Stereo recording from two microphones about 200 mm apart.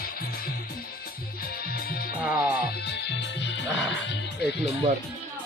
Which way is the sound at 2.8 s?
60° left (ahead or behind).